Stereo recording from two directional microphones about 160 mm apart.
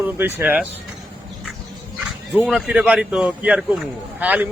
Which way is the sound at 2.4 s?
5° right (ahead or behind).